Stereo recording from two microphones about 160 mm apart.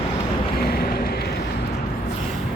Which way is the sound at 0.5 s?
70° left (ahead or behind).